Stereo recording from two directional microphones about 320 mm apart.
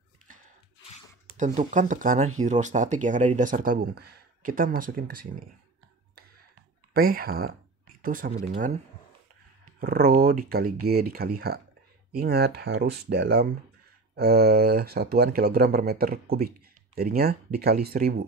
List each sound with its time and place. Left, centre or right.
1.2 s speech: right
6.9 s speech: right
9.8 s speech: right